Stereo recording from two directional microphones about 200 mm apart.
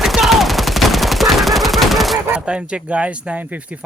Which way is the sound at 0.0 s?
Centre (ahead or behind).